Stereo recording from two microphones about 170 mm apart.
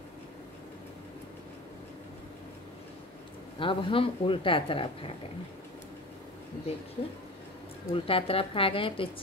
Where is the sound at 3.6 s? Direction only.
30° left (ahead or behind).